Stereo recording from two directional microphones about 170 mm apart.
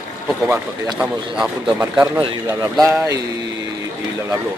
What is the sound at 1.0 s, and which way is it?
Speech, 5° right (ahead or behind).